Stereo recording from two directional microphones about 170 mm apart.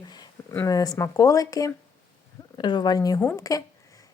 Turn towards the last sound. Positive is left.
turn(degrees=20)  # may be behind; listen again after turning